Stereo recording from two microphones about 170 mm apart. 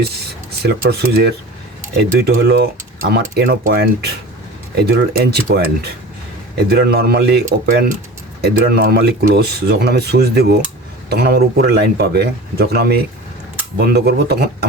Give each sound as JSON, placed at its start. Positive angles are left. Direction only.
{"t": 0.6, "sound": "speech", "side_deg": -70}